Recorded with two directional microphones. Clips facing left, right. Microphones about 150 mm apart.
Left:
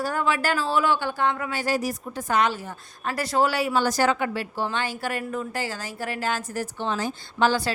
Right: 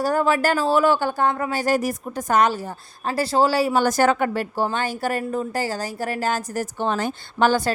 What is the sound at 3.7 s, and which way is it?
Speech, 50° right (ahead or behind).